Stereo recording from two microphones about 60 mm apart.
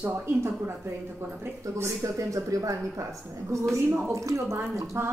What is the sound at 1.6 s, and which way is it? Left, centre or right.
A woman's voice, right.